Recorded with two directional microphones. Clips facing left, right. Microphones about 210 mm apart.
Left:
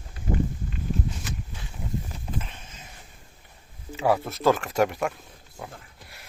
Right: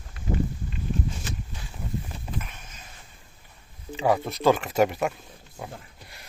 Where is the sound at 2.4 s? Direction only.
30° left (ahead or behind).